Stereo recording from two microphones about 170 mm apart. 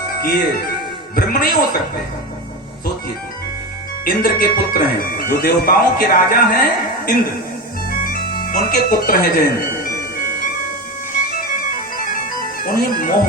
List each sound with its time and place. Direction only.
0.2 s speech: 60° left (ahead or behind)
4.0 s speech: 60° left (ahead or behind)
7.9 s music: 55° left (ahead or behind)
11.5 s music: 55° left (ahead or behind)